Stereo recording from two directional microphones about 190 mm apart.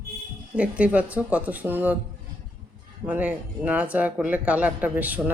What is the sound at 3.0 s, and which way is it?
Speech, 10° right (ahead or behind).